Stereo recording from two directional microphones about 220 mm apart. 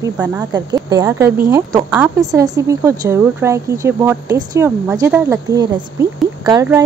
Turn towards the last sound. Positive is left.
turn(degrees=-15)  # may be behind; listen again after turning